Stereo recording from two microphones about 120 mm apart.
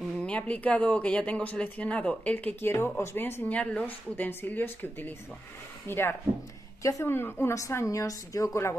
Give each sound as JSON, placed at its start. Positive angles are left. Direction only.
{"t": 0.2, "sound": "a woman's voice", "side_deg": 10}